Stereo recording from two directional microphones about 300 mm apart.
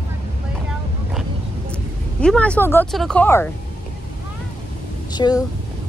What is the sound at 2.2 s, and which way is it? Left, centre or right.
Speech, centre.